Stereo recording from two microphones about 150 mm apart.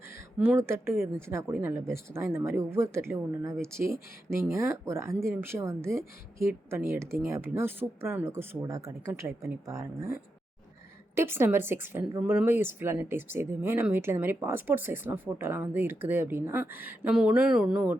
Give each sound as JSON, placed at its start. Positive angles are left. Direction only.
{"t": 0.3, "sound": "speech", "side_deg": -15}
{"t": 11.1, "sound": "speech", "side_deg": -15}